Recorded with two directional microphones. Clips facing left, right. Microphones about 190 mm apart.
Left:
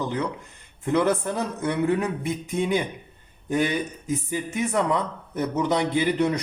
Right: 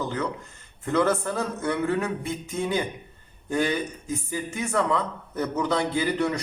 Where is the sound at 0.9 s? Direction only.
15° left (ahead or behind).